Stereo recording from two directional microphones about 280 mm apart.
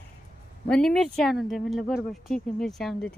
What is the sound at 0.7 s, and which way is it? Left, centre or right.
Speech, centre.